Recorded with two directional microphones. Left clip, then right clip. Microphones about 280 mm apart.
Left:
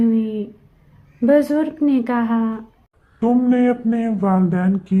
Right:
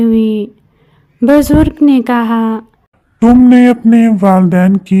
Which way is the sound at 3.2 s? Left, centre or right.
Right.